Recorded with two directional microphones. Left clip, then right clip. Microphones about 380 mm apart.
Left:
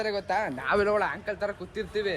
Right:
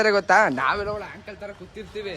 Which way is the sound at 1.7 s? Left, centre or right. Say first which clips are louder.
Left 2 dB; centre.